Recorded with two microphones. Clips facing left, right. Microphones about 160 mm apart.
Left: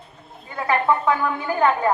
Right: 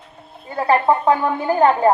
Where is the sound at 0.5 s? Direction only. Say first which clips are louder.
Right 4 dB; 35° right (ahead or behind).